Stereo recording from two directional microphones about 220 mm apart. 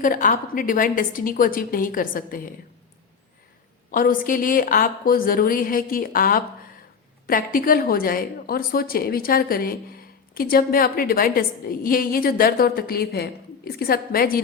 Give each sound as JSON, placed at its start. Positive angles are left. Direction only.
{"t": 0.0, "sound": "a woman's voice", "side_deg": 35}
{"t": 3.9, "sound": "a woman's voice", "side_deg": 40}